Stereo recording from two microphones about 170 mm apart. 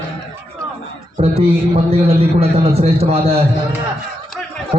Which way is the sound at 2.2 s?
35° right (ahead or behind).